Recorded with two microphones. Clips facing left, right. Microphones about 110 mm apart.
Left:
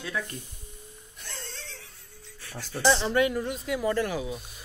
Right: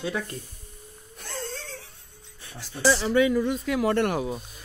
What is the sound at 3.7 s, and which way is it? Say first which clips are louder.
Speech: right 3 dB; 75° right (ahead or behind).